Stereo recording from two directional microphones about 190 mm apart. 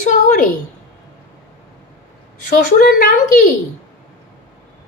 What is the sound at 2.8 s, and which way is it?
Speech, 50° left (ahead or behind).